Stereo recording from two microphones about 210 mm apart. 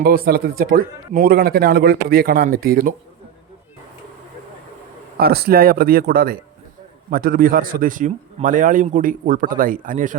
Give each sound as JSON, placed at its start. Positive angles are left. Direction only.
{"t": 0.0, "sound": "speech", "side_deg": -45}
{"t": 5.1, "sound": "a man's voice", "side_deg": -50}